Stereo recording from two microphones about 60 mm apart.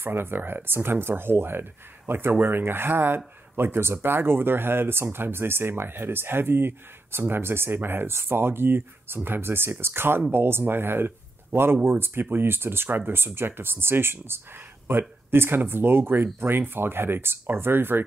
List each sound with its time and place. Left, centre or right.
0.0 s speech: right